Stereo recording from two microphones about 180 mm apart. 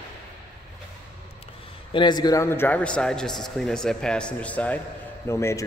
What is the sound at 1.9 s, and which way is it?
A man's voice, 25° left (ahead or behind).